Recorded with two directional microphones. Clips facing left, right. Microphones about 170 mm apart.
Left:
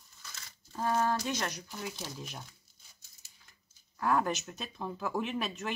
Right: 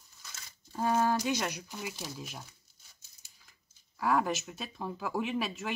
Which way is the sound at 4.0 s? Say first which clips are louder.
Right 1 dB; 5° right (ahead or behind).